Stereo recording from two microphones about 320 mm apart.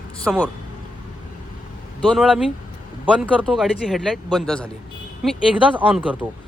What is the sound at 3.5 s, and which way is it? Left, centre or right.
Speech, centre.